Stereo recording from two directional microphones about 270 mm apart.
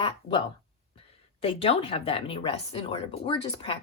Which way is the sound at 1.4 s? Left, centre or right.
Left.